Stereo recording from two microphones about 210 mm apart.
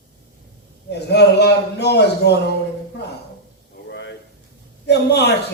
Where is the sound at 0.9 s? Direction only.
50° left (ahead or behind).